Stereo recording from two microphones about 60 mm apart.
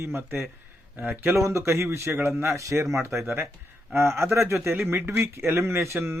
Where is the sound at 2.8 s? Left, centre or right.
Right.